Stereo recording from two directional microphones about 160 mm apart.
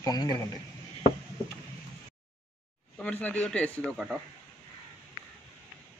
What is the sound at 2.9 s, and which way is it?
A man's voice, 10° left (ahead or behind).